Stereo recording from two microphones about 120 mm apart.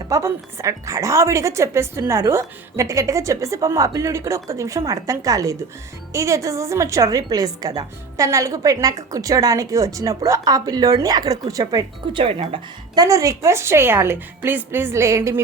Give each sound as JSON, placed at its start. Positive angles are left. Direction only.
{"t": 0.1, "sound": "a woman's voice", "side_deg": -25}
{"t": 12.1, "sound": "speech", "side_deg": -50}
{"t": 13.0, "sound": "a woman's voice", "side_deg": -30}